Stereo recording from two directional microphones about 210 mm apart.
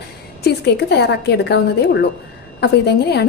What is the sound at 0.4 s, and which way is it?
A woman's voice, 50° left (ahead or behind).